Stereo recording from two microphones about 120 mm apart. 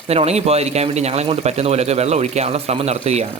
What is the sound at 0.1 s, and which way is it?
Speech, 60° right (ahead or behind).